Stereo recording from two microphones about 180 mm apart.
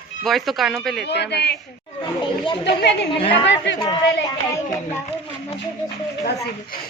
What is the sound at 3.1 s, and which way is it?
Speech, 30° left (ahead or behind).